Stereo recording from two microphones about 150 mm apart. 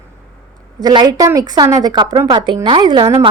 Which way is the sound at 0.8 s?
25° right (ahead or behind).